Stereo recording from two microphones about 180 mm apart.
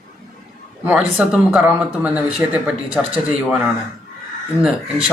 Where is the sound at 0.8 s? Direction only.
5° right (ahead or behind).